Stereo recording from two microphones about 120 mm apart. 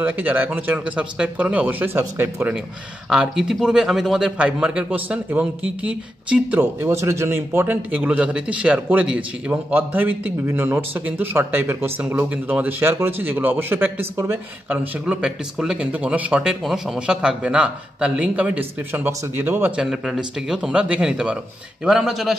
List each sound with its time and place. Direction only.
0.0 s speech: 15° right (ahead or behind)
3.1 s speech: 5° right (ahead or behind)
6.6 s speech: 20° right (ahead or behind)
14.7 s speech: 10° right (ahead or behind)
19.8 s speech: 5° right (ahead or behind)